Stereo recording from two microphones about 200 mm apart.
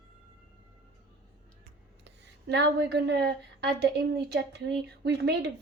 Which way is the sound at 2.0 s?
60° right (ahead or behind).